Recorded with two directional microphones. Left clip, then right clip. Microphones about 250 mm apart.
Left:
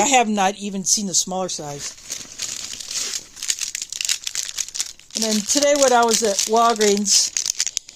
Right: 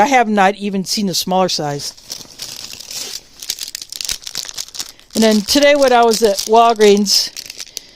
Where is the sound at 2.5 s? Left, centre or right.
Right.